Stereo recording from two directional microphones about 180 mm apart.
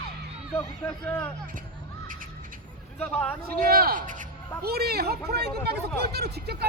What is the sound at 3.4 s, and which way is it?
Speech, 55° right (ahead or behind).